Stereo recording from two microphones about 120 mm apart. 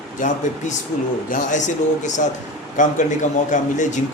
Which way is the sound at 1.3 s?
90° left.